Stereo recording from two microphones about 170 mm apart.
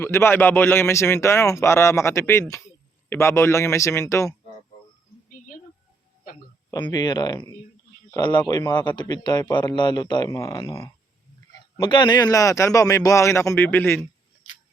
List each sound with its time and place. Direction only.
0.0 s a man's voice: 15° left (ahead or behind)
6.7 s a man's voice: 25° left (ahead or behind)